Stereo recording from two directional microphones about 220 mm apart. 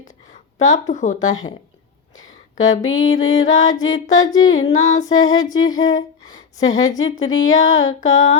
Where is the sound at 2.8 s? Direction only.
65° left (ahead or behind).